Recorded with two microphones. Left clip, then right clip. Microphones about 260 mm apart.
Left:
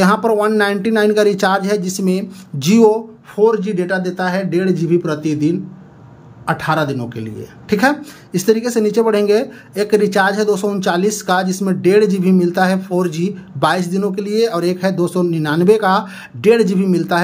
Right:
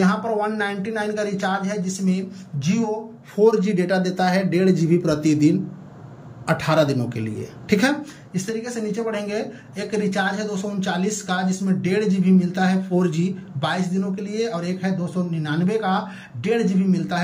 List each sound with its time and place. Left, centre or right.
0.2 s speech: left
3.3 s speech: centre
8.3 s speech: left